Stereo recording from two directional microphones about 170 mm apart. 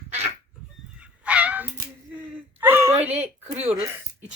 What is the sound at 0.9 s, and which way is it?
Goose, 5° right (ahead or behind).